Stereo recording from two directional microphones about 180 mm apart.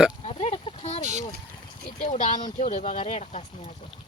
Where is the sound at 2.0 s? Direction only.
45° left (ahead or behind).